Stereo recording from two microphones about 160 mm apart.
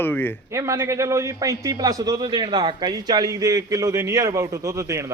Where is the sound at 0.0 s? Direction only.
15° left (ahead or behind).